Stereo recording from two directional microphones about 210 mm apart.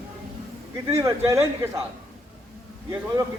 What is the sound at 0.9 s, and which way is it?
Speech, 15° right (ahead or behind).